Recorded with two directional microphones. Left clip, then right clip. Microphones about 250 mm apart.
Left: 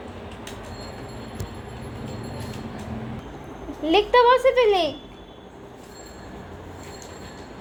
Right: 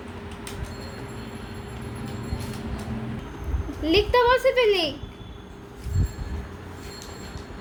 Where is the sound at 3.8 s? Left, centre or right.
Centre.